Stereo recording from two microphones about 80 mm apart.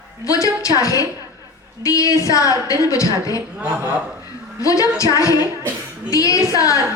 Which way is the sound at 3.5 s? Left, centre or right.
Centre.